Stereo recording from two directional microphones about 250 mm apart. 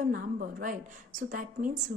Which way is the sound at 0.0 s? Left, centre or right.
Right.